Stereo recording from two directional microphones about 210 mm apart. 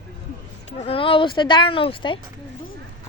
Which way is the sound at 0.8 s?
25° left (ahead or behind).